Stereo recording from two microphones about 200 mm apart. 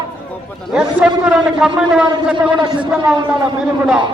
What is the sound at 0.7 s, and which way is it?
A man's voice, 5° right (ahead or behind).